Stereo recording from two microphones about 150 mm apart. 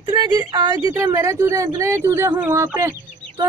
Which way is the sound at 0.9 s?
15° right (ahead or behind).